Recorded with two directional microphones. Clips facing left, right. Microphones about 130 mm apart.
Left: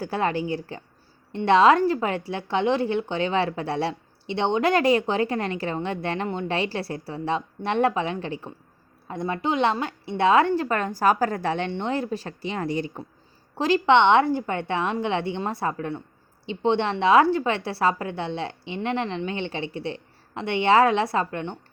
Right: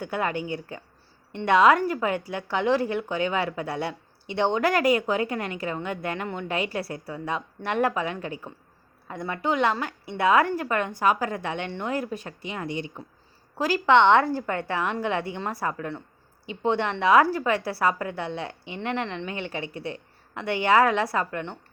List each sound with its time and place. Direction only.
0.0 s a woman's voice: 30° left (ahead or behind)
13.6 s a woman's voice: 25° left (ahead or behind)